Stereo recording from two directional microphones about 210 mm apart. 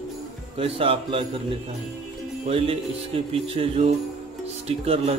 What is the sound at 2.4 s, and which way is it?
Speech, 25° right (ahead or behind).